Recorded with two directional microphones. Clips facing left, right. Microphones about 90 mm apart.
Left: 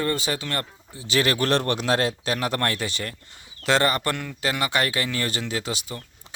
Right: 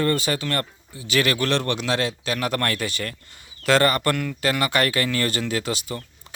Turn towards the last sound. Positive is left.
turn(degrees=20)  # may be behind; listen again after turning